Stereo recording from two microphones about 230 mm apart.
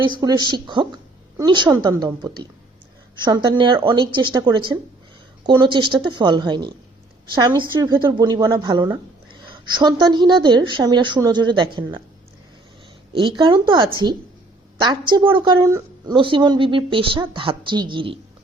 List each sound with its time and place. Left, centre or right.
0.0 s a woman's voice: centre
13.1 s a woman's voice: right